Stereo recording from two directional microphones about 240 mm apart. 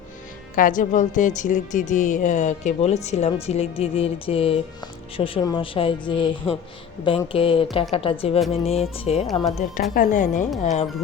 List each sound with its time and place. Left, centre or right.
0.5 s a woman's voice: left